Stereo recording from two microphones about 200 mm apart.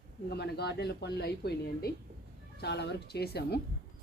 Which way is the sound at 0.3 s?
55° left (ahead or behind).